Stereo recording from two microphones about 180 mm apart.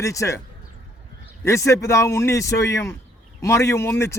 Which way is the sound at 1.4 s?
15° left (ahead or behind).